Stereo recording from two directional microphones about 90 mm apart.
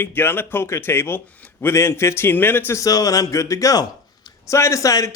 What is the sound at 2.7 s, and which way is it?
A man's voice, 40° left (ahead or behind).